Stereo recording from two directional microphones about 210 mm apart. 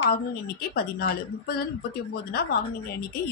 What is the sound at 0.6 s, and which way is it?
A woman's voice, 50° left (ahead or behind).